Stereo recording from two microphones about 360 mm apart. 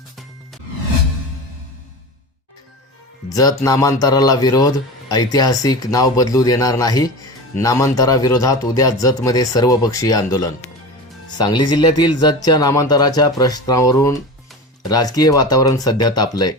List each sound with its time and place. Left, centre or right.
3.2 s speech: centre